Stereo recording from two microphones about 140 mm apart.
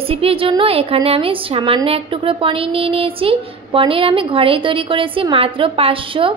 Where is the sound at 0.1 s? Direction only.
40° right (ahead or behind).